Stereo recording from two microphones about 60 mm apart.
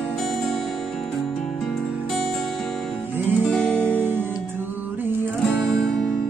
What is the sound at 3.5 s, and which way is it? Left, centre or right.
Music, centre.